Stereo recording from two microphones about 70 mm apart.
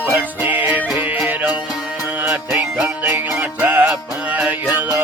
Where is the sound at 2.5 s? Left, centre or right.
Right.